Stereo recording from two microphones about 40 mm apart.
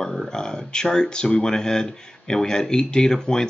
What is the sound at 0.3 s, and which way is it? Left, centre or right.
Speech, centre.